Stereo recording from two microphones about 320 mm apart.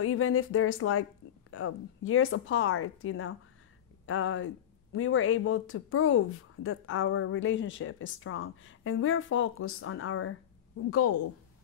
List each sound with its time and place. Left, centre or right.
0.0 s a woman's voice: left